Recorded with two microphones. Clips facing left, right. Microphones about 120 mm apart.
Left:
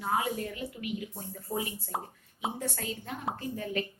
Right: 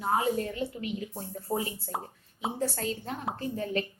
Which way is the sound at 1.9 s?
Centre (ahead or behind).